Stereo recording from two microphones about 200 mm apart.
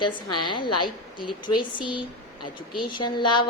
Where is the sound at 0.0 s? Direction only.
25° left (ahead or behind).